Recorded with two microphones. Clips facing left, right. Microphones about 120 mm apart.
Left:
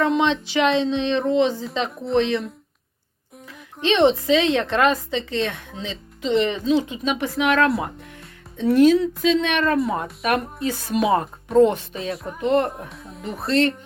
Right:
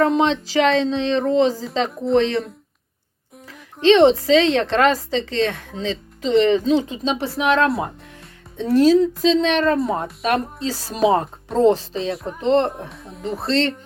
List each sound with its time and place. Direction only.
0.1 s a woman's voice: 35° right (ahead or behind)
3.8 s a woman's voice: 30° right (ahead or behind)
12.1 s speech: centre (ahead or behind)
12.4 s a woman's voice: 30° right (ahead or behind)
12.9 s speech: centre (ahead or behind)
13.2 s a woman's voice: 30° right (ahead or behind)